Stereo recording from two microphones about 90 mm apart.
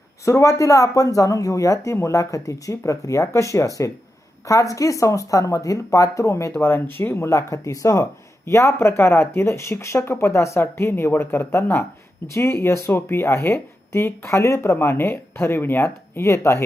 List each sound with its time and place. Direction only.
0.3 s speech: 35° left (ahead or behind)